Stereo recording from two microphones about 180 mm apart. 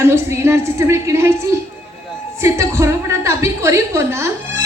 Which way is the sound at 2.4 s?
15° right (ahead or behind).